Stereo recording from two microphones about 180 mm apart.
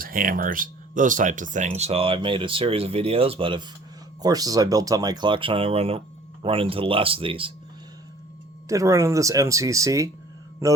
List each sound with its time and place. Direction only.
0.0 s speech: 50° right (ahead or behind); by 7.5 s 30° right (ahead or behind)
8.7 s speech: 15° right (ahead or behind)